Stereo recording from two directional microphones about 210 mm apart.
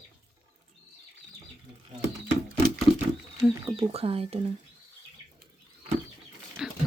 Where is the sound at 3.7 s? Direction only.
30° right (ahead or behind).